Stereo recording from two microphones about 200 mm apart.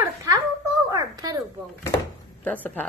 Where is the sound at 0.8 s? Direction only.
20° right (ahead or behind).